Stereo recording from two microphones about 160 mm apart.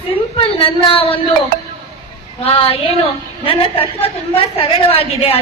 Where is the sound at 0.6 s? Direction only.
35° left (ahead or behind).